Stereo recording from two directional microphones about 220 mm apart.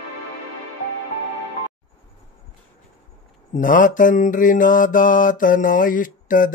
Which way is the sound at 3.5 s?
35° left (ahead or behind).